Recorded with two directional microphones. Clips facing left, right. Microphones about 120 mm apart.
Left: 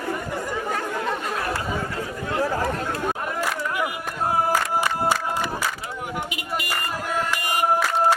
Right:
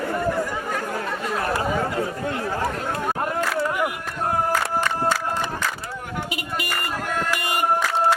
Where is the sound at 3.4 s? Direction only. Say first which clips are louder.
Right 3 dB; 5° left (ahead or behind).